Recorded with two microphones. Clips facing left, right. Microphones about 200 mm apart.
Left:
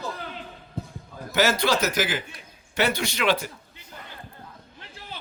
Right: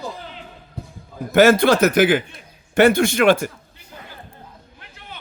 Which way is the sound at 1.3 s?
55° right (ahead or behind).